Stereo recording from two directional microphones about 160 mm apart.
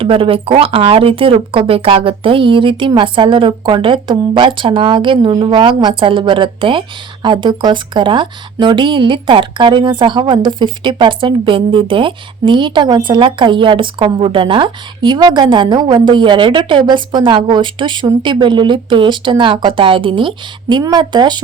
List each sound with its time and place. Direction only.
0.0 s speech: 35° right (ahead or behind)